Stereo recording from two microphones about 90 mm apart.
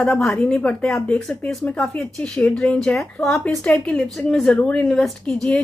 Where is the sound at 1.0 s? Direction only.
15° left (ahead or behind).